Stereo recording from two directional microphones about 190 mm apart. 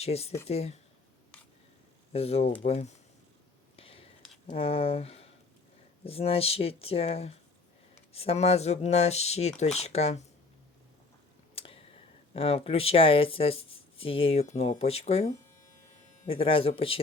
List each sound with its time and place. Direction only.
0.0 s speech: 35° left (ahead or behind)
2.1 s speech: 35° left (ahead or behind)
3.8 s a sound: 30° left (ahead or behind)
6.1 s speech: 30° left (ahead or behind)
11.5 s a sound: 30° left (ahead or behind)
12.3 s speech: 30° left (ahead or behind)